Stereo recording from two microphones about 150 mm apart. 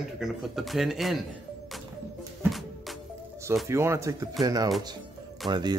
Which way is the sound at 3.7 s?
20° right (ahead or behind).